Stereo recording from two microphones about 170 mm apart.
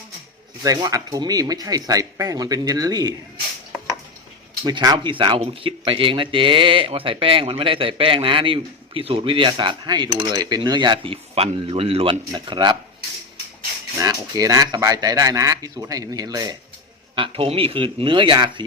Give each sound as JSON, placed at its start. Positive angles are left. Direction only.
{"t": 0.6, "sound": "speech", "side_deg": -20}
{"t": 4.6, "sound": "speech", "side_deg": -25}
{"t": 14.0, "sound": "speech", "side_deg": -20}
{"t": 17.2, "sound": "speech", "side_deg": -35}